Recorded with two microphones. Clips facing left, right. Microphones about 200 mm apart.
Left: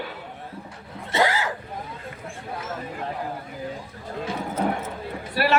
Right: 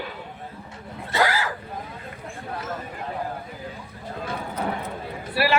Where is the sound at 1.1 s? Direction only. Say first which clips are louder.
Left 1 dB; 25° left (ahead or behind).